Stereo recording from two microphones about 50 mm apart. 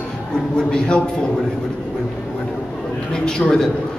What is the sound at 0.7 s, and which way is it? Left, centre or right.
Speech, centre.